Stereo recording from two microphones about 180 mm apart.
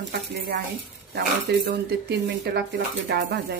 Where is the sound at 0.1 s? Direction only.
60° right (ahead or behind).